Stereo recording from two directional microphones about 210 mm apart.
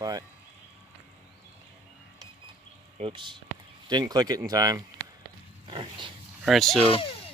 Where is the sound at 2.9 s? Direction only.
25° right (ahead or behind).